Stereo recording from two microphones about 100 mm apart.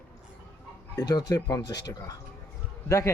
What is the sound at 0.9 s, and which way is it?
Speech, 40° left (ahead or behind).